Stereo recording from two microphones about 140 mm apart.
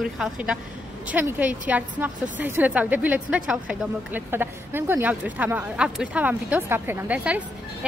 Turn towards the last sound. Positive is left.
turn(degrees=-10)  # may be behind; listen again after turning